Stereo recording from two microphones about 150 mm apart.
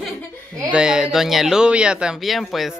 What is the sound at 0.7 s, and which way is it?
Speech, 5° right (ahead or behind).